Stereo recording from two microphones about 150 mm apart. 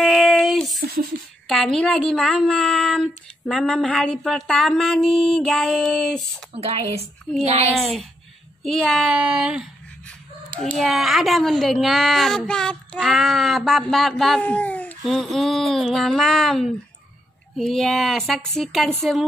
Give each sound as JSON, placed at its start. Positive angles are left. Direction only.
{"t": 0.0, "sound": "a sound", "side_deg": 0}
{"t": 1.5, "sound": "a child's voice", "side_deg": 5}
{"t": 6.5, "sound": "speech", "side_deg": -40}
{"t": 8.6, "sound": "a child's voice", "side_deg": 0}